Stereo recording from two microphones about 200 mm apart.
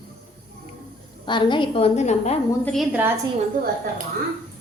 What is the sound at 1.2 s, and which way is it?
A woman's voice, 25° left (ahead or behind).